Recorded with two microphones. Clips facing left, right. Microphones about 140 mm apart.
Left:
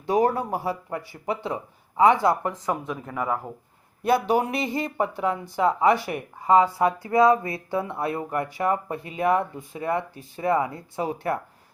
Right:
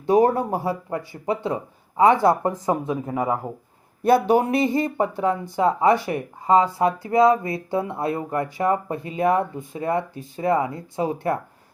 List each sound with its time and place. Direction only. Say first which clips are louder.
0.1 s speech: right 4 dB; 25° right (ahead or behind)